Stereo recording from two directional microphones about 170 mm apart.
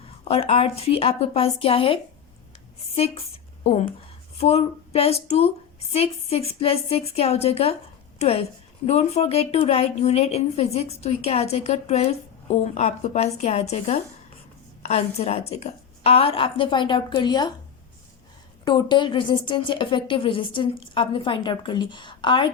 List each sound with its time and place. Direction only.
0.0 s a woman's voice: 35° left (ahead or behind)
18.6 s a woman's voice: 25° left (ahead or behind)